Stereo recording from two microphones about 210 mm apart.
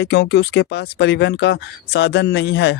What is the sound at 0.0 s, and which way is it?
Speech, 55° left (ahead or behind).